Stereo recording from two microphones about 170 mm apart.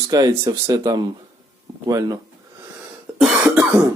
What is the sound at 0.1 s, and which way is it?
Speech, 25° right (ahead or behind).